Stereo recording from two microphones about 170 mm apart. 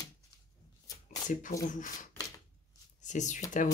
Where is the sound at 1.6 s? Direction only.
50° left (ahead or behind).